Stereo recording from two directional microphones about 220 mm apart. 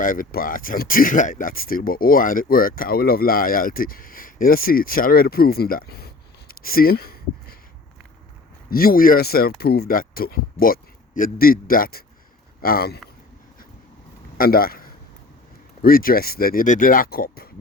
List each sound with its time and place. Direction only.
0.0 s speech: 40° left (ahead or behind)
6.5 s a sound: 40° left (ahead or behind)
8.7 s speech: 40° left (ahead or behind)
14.3 s a man's voice: 40° left (ahead or behind)